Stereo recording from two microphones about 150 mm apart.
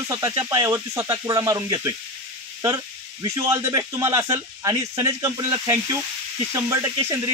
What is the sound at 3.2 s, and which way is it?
Sizzle, 20° right (ahead or behind).